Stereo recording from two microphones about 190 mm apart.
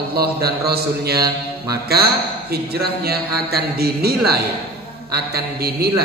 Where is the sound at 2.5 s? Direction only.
55° right (ahead or behind).